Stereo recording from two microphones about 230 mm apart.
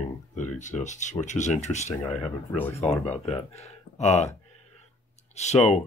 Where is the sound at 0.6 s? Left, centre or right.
Left.